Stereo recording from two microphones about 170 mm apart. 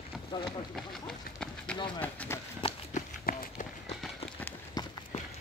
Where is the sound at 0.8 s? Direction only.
Centre (ahead or behind).